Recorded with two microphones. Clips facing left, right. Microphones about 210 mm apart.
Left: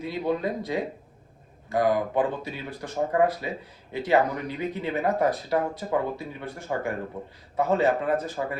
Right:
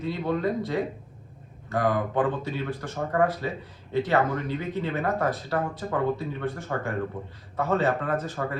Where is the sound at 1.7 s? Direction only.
15° left (ahead or behind).